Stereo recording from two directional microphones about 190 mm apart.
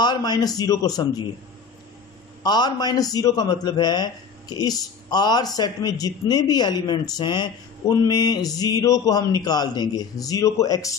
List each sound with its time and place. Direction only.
0.0 s a man's voice: 20° left (ahead or behind)
2.4 s a man's voice: 20° left (ahead or behind)